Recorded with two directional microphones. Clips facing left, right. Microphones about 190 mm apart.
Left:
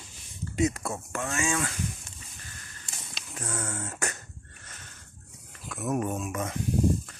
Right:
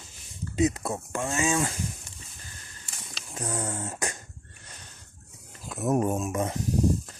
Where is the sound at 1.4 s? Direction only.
30° right (ahead or behind).